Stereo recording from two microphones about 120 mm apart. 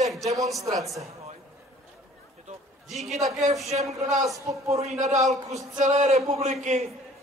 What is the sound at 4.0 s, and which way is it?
Speech, 90° right.